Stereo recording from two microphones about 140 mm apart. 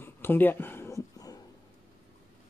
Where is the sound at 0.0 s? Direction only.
15° left (ahead or behind).